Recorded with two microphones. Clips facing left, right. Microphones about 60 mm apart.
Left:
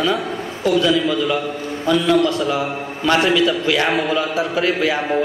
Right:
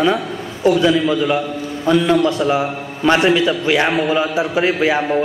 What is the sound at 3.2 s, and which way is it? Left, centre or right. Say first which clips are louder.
A man's voice: right 2 dB; centre.